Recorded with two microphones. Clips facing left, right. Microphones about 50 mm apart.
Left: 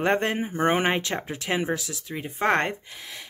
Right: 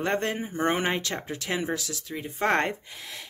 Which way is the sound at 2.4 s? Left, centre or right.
Centre.